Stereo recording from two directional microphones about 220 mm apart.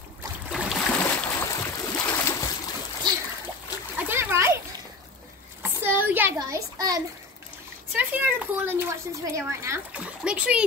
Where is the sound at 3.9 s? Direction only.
10° right (ahead or behind).